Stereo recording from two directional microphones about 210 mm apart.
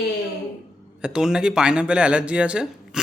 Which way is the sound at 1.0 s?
5° right (ahead or behind).